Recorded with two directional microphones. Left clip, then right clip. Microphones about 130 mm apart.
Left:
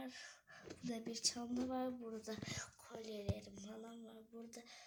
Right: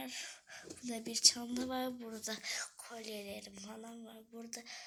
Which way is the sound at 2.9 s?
20° left (ahead or behind).